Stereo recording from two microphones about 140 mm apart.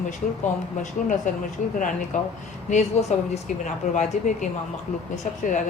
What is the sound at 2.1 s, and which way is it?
A woman's voice, 60° left (ahead or behind).